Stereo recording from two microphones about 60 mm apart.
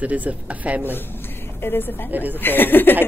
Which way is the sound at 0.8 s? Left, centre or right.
Left.